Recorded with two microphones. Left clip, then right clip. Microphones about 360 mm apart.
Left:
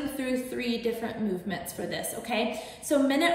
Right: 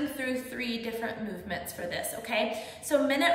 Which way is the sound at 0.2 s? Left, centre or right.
Centre.